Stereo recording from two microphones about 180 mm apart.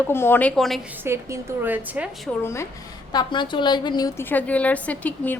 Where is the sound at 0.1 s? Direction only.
10° left (ahead or behind).